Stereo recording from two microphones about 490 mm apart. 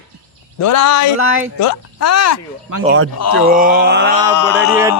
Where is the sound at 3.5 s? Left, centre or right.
Centre.